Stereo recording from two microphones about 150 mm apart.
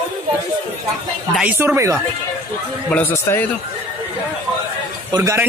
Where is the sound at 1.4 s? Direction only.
10° right (ahead or behind).